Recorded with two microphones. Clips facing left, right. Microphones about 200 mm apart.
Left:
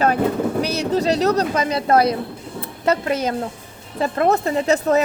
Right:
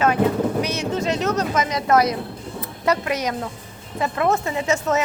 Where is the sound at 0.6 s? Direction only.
35° left (ahead or behind).